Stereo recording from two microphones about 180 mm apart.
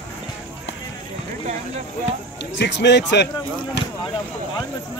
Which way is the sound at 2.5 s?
80° left.